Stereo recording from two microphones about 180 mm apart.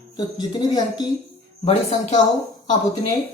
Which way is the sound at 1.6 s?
35° left (ahead or behind).